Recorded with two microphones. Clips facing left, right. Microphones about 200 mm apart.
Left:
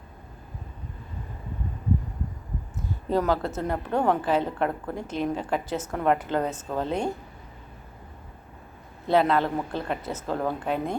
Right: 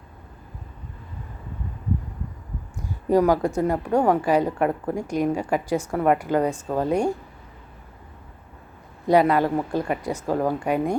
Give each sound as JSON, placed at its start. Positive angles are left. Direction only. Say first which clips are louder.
{"t": 3.1, "sound": "a woman's voice", "louder": "right 6 dB", "side_deg": -10}
{"t": 9.0, "sound": "a woman's voice", "louder": "right 4 dB", "side_deg": -10}